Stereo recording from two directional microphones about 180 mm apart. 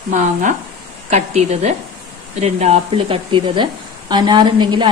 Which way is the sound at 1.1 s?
35° right (ahead or behind).